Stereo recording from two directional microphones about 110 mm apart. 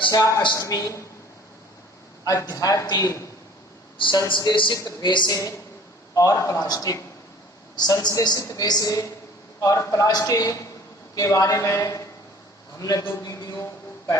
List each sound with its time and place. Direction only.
0.0 s a man's voice: 35° left (ahead or behind)
2.2 s a woman's voice: 35° left (ahead or behind)
3.9 s speech: 50° left (ahead or behind)
4.8 s a woman's voice: 35° left (ahead or behind)
6.1 s a woman's voice: 30° left (ahead or behind)
13.2 s a sound: 30° left (ahead or behind)